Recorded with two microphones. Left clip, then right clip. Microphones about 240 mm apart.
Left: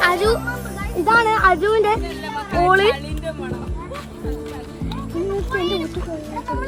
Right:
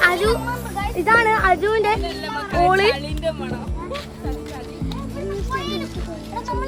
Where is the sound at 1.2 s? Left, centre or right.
Left.